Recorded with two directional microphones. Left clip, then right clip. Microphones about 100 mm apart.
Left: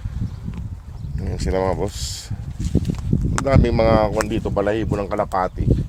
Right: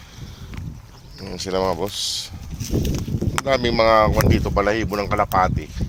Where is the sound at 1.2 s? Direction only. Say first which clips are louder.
Even; 55° left (ahead or behind).